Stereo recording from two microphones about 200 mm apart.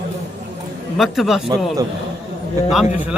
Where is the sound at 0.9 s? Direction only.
Centre (ahead or behind).